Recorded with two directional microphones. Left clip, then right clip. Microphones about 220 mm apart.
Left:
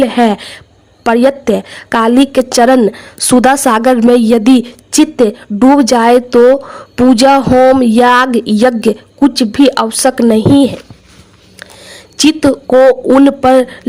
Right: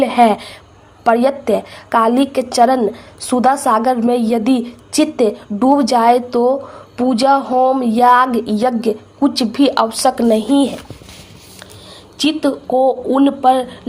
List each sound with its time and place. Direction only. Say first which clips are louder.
0.0 s a woman's voice: left 1 dB; 45° left (ahead or behind)
12.3 s a woman's voice: left 7 dB; 55° left (ahead or behind)